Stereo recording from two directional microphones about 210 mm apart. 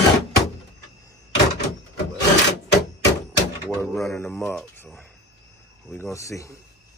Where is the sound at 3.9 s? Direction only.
Centre (ahead or behind).